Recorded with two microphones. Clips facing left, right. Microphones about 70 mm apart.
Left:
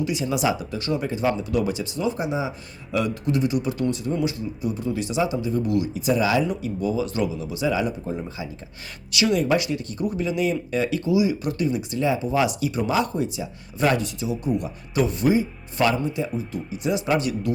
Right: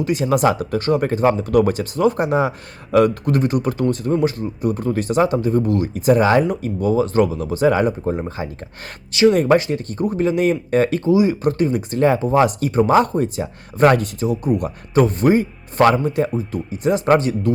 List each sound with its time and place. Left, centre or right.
0.0 s speech: right